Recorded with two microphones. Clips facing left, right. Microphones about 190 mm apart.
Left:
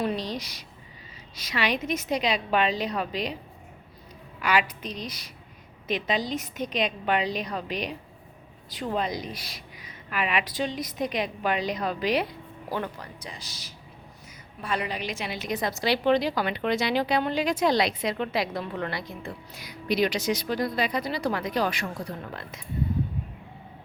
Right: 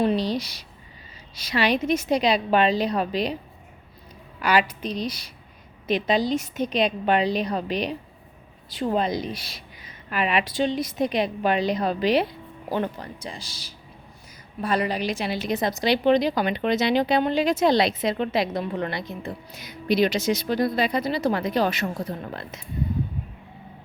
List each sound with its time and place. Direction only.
0.0 s a woman's voice: 30° right (ahead or behind)
4.4 s a woman's voice: 35° right (ahead or behind)